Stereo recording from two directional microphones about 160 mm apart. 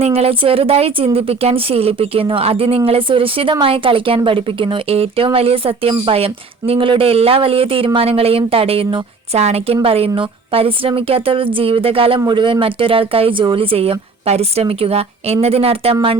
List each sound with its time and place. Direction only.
0.0 s a woman's voice: 40° right (ahead or behind)